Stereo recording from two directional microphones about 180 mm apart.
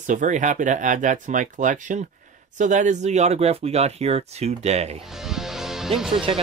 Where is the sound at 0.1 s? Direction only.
45° right (ahead or behind).